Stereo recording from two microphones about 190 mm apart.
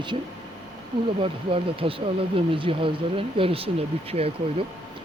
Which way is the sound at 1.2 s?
30° right (ahead or behind).